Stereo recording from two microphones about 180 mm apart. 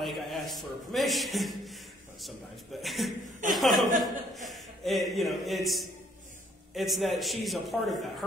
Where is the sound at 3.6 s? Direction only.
45° right (ahead or behind).